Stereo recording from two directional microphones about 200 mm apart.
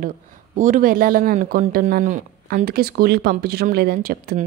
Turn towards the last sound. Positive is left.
turn(degrees=-50)  # may be behind; listen again after turning